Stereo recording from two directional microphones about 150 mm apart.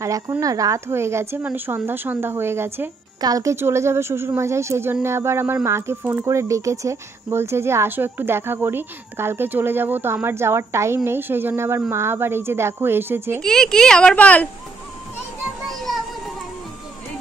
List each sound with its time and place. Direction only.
0.4 s speech: 25° right (ahead or behind)
13.4 s speech: 5° left (ahead or behind)
15.7 s music: centre (ahead or behind)